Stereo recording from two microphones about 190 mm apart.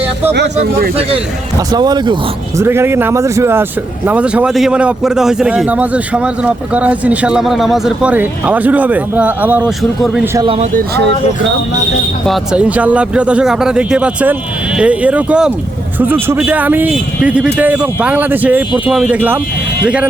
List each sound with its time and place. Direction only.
0.3 s speech: 60° right (ahead or behind)
1.7 s speech: 20° right (ahead or behind); by 10.2 s 5° right (ahead or behind)
10.3 s speech: 30° right (ahead or behind)
10.8 s speech: 60° right (ahead or behind)
12.2 s speech: centre (ahead or behind)